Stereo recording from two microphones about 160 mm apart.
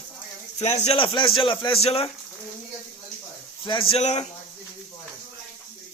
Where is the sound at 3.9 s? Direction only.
45° left (ahead or behind).